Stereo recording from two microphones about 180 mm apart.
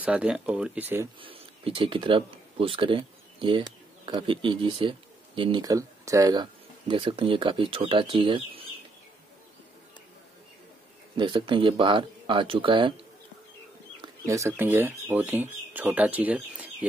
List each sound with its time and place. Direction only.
0.0 s speech: 5° right (ahead or behind)
1.2 s speech: 30° right (ahead or behind)
11.1 s speech: 25° right (ahead or behind)
14.0 s speech: 15° right (ahead or behind)